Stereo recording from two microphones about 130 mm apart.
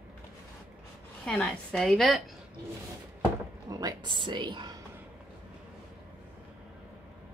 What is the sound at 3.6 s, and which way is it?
Speech, 30° right (ahead or behind).